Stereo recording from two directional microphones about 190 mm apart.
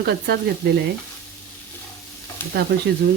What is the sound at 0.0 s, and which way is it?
Speech, 60° right (ahead or behind).